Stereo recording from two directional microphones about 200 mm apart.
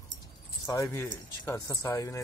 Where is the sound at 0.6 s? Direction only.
15° left (ahead or behind).